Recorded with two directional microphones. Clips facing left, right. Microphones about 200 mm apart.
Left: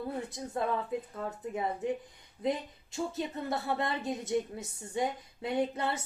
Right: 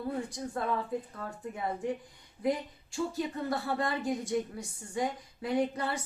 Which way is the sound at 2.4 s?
20° left (ahead or behind).